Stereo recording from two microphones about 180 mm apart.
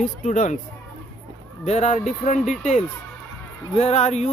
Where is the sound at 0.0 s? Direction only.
40° left (ahead or behind).